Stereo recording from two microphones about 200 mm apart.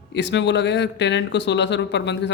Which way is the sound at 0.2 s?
60° left (ahead or behind).